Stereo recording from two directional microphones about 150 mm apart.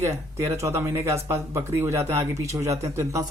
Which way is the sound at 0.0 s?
20° right (ahead or behind).